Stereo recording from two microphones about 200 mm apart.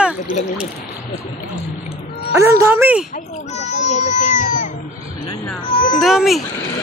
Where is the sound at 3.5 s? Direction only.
35° left (ahead or behind).